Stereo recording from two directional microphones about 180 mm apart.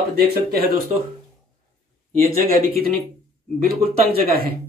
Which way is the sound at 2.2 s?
55° right (ahead or behind).